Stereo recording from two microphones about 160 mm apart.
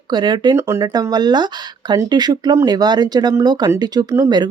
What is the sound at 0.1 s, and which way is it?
Speech, 25° right (ahead or behind).